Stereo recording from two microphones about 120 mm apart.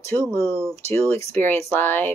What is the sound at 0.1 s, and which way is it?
Speech, 20° left (ahead or behind).